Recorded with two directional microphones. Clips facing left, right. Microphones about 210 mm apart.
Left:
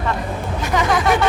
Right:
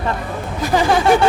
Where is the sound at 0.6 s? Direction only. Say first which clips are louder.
Right 4 dB; 30° right (ahead or behind).